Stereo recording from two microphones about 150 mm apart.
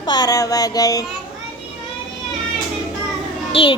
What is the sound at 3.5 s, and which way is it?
Speech, 35° left (ahead or behind).